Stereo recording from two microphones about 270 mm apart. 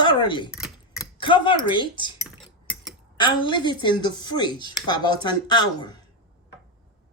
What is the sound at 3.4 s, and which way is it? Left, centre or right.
Speech, centre.